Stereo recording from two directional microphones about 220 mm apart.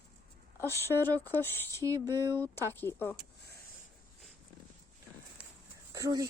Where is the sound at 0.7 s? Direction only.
10° left (ahead or behind).